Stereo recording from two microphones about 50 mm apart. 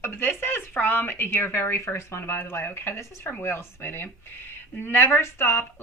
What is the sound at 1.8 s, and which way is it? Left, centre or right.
Speech, left.